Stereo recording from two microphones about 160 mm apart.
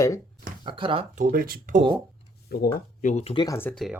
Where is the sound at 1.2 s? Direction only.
60° right (ahead or behind).